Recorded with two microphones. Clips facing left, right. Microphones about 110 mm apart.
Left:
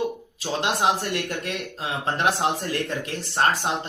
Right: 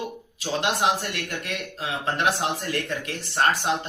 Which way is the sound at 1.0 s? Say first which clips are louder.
Left 4 dB; 30° left (ahead or behind).